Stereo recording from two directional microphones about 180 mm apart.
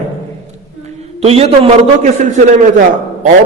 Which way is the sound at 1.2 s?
35° right (ahead or behind).